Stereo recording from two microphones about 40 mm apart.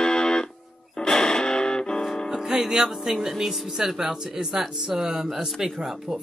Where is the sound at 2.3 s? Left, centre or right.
Centre.